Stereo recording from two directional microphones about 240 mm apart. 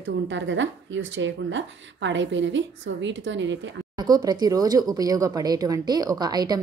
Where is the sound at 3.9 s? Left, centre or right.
Centre.